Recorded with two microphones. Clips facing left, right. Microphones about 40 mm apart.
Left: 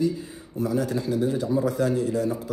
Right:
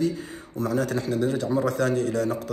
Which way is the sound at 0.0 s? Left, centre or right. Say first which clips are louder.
Left 1 dB; right.